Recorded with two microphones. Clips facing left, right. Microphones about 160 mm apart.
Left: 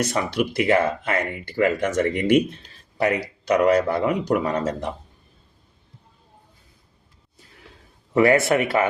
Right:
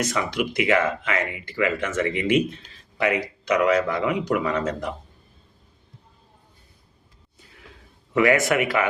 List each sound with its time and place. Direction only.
0.0 s speech: 35° left (ahead or behind)
8.1 s speech: 35° left (ahead or behind)